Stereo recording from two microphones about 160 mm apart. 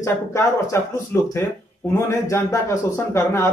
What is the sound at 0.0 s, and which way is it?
A man's voice, 20° left (ahead or behind).